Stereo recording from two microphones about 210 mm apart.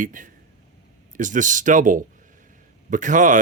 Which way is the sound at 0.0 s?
40° right (ahead or behind).